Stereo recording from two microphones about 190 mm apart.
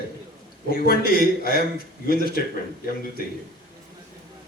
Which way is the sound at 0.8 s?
50° left (ahead or behind).